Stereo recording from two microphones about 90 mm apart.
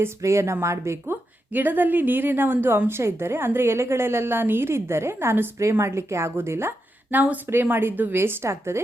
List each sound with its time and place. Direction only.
0.0 s a woman's voice: 35° right (ahead or behind)